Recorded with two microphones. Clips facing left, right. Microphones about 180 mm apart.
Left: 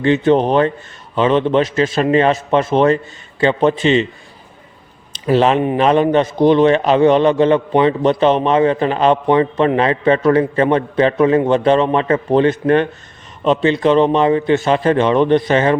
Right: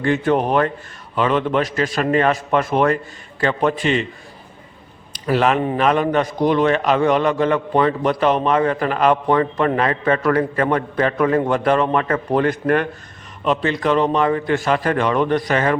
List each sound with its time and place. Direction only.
0.0 s a man's voice: 25° left (ahead or behind)
5.1 s a man's voice: 25° left (ahead or behind)